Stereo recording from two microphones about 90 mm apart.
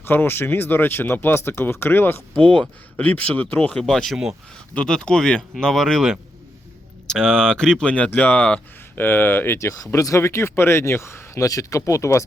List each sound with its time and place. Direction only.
0.0 s speech: 25° left (ahead or behind)
9.6 s speech: 35° left (ahead or behind)